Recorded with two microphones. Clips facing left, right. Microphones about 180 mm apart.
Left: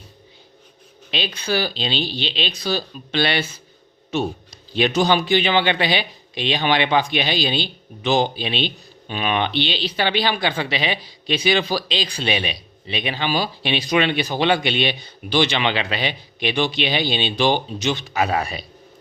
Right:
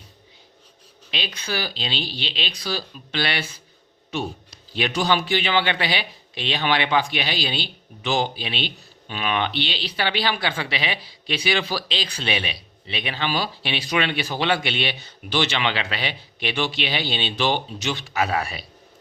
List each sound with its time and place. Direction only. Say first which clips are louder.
1.1 s speech: left 6 dB; 30° left (ahead or behind)
4.7 s speech: left 4 dB; 20° left (ahead or behind)